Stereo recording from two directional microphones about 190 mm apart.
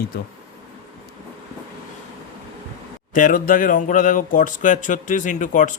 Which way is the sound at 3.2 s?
45° left (ahead or behind).